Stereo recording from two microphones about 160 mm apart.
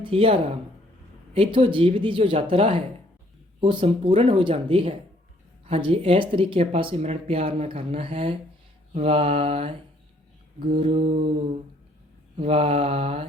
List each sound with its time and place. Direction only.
0.0 s speech: 35° right (ahead or behind)
12.4 s speech: 35° right (ahead or behind)